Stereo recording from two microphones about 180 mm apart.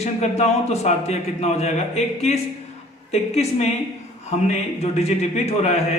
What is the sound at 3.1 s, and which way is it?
Speech, 35° left (ahead or behind).